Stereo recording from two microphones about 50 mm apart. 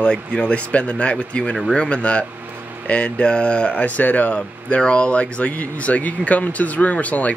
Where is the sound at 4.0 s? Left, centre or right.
Left.